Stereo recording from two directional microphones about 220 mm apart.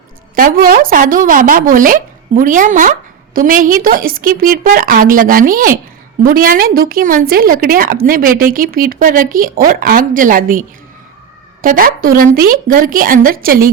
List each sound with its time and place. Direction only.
0.3 s a woman's voice: 40° right (ahead or behind)
11.6 s a woman's voice: 40° right (ahead or behind)